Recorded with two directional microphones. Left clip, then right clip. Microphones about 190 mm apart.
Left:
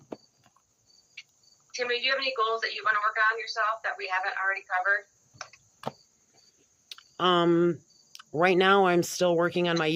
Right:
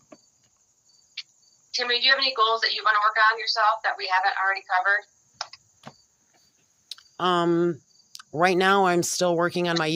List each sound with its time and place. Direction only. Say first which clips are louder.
1.2 s cricket: right 9 dB; 30° right (ahead or behind)
1.7 s speech: right 6 dB; 30° right (ahead or behind)
6.8 s speech: right 1 dB; 20° right (ahead or behind)